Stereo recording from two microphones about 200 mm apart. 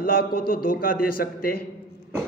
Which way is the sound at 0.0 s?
50° left (ahead or behind).